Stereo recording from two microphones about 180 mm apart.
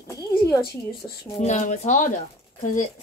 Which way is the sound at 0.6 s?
60° left (ahead or behind).